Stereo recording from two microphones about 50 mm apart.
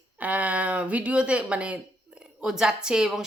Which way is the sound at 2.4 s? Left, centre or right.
Centre.